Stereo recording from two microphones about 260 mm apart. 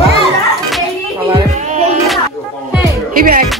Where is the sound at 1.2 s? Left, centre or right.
Right.